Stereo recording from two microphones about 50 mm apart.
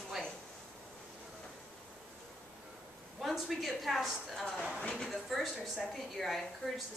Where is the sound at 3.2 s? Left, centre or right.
Centre.